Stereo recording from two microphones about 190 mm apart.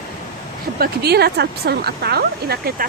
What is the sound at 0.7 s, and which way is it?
Speech, 55° right (ahead or behind).